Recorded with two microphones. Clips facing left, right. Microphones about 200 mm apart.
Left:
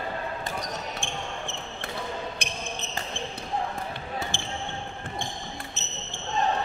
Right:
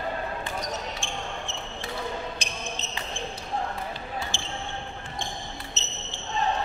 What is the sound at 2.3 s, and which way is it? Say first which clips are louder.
Basketball bounce: even; 60° left (ahead or behind).